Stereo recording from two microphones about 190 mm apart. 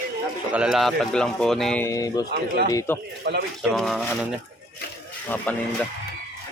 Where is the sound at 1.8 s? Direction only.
15° left (ahead or behind).